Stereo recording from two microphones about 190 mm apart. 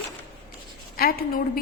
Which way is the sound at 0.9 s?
50° left (ahead or behind).